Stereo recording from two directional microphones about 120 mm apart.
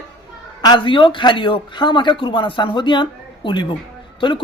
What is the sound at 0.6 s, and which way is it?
A woman's voice, 40° left (ahead or behind).